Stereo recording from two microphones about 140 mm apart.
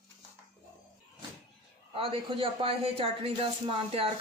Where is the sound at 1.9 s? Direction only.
40° right (ahead or behind).